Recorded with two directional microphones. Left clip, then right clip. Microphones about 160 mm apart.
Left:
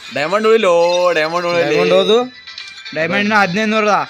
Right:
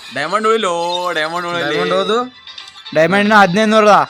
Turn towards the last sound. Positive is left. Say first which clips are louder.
# right 5 dB
turn(degrees=-35)  # may be behind; listen again after turning